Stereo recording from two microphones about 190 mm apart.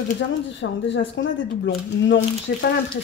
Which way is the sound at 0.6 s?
65° left (ahead or behind).